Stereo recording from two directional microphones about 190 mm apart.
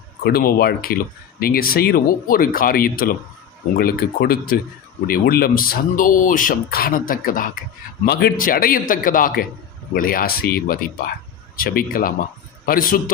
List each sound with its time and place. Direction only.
0.3 s speech: 55° left (ahead or behind)